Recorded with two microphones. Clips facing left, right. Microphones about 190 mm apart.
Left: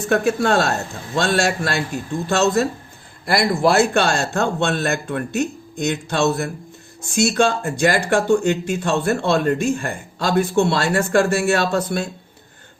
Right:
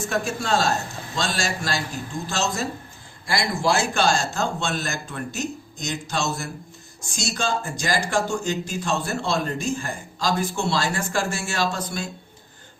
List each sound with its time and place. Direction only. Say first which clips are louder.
0.0 s speech: left 8 dB; 60° left (ahead or behind)